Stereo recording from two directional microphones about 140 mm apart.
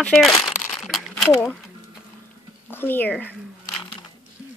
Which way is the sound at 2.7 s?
15° left (ahead or behind).